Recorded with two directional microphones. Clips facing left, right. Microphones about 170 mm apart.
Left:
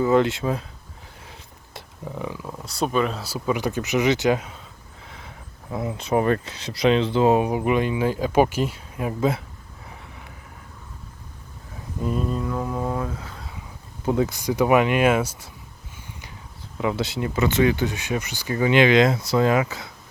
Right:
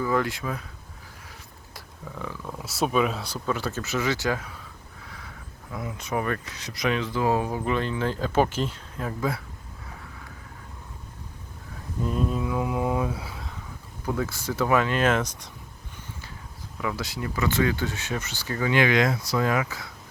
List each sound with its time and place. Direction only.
0.0 s speech: 25° left (ahead or behind)
1.3 s a sound: 25° left (ahead or behind)
2.6 s speech: 5° right (ahead or behind); by 4.6 s 20° left (ahead or behind)
5.0 s a sound: 25° left (ahead or behind)
5.7 s speech: 25° left (ahead or behind); by 9.1 s 10° left (ahead or behind)
12.0 s mantra: centre (ahead or behind)
14.0 s speech: 20° left (ahead or behind)
16.7 s speech: 25° left (ahead or behind)